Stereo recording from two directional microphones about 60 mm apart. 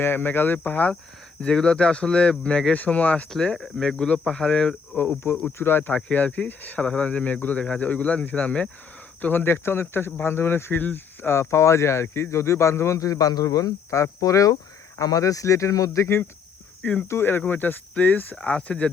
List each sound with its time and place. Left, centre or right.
0.0 s speech: left
3.2 s speech: centre
4.9 s speech: left
5.5 s speech: left
5.9 s speech: left
6.8 s speech: centre
9.2 s a man's voice: left
16.0 s speech: left
18.3 s speech: centre